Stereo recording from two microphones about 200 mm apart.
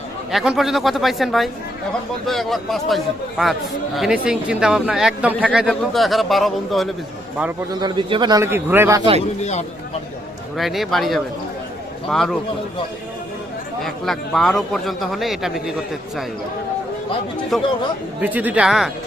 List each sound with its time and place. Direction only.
0.3 s a man's voice: centre (ahead or behind)
7.7 s a man's voice: 20° right (ahead or behind)
9.4 s speech: 35° left (ahead or behind)
10.6 s a man's voice: centre (ahead or behind)
13.8 s a man's voice: centre (ahead or behind)
17.5 s a man's voice: centre (ahead or behind)